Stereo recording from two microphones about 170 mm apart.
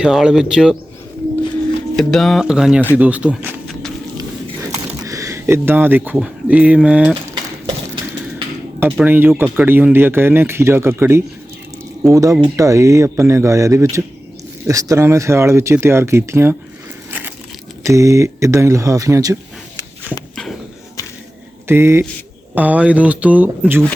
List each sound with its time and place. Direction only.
0.0 s speech: 5° right (ahead or behind)
2.0 s speech: centre (ahead or behind)
5.0 s speech: 20° right (ahead or behind)
9.0 s speech: 10° right (ahead or behind)
17.1 s crushing: 10° right (ahead or behind)
17.8 s speech: 20° right (ahead or behind)
20.3 s a sound: centre (ahead or behind)
21.7 s speech: 15° right (ahead or behind)